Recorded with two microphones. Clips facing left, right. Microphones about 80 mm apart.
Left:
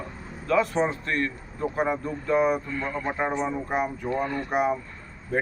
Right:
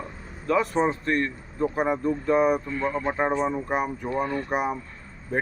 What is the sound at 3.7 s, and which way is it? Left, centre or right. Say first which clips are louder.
Speech: even; centre.